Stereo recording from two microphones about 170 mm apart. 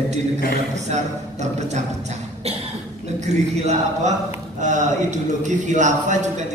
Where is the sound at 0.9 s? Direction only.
45° right (ahead or behind).